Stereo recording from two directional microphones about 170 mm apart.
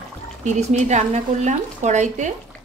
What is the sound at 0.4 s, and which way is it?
Speech, 40° right (ahead or behind).